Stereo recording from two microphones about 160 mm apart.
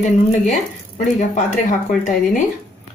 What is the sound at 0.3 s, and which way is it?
Speech, 50° left (ahead or behind).